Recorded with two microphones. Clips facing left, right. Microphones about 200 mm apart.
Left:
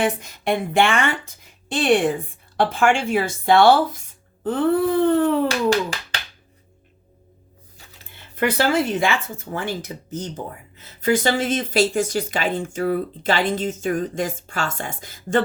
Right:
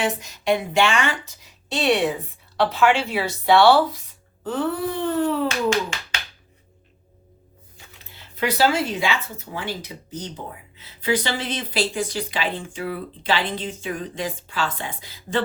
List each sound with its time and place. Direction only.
0.0 s speech: 55° left (ahead or behind)
4.4 s a sound: 55° left (ahead or behind)
8.1 s speech: 55° left (ahead or behind)